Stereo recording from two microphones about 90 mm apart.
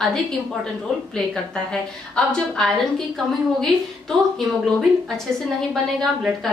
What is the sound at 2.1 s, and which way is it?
Speech, 5° left (ahead or behind).